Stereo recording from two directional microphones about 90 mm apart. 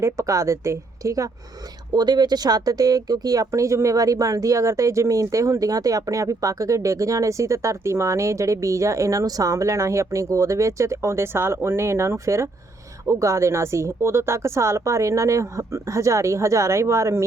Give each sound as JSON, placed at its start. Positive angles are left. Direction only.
{"t": 0.0, "sound": "speech", "side_deg": -35}
{"t": 1.9, "sound": "speech", "side_deg": -50}